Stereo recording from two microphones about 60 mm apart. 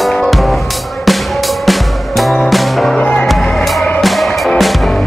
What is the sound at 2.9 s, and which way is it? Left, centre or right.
Music, centre.